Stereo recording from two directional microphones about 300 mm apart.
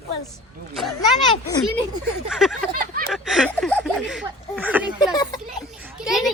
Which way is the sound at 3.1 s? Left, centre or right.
Centre.